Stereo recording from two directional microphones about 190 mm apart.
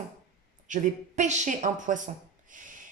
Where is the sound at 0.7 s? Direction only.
40° right (ahead or behind).